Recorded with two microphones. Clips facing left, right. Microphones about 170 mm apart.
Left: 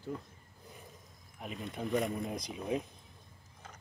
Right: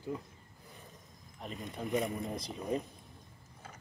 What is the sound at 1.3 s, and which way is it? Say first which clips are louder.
Speech: left 1 dB; centre (ahead or behind).